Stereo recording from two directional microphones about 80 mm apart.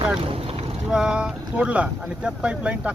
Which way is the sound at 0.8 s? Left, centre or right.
Centre.